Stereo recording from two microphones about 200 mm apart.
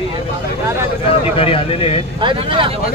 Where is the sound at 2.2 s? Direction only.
25° right (ahead or behind).